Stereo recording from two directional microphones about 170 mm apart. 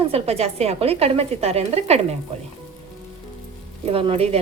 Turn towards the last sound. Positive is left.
turn(degrees=-35)  # may be behind; listen again after turning